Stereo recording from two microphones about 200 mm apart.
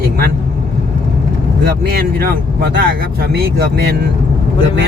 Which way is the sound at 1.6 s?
50° right (ahead or behind).